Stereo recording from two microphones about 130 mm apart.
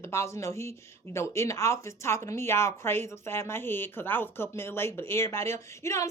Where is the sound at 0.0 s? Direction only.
20° left (ahead or behind).